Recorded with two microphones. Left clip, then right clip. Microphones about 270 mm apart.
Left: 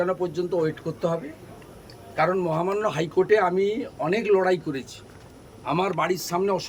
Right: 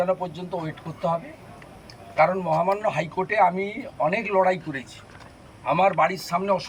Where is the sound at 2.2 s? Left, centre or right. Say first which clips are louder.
Right 3 dB; centre.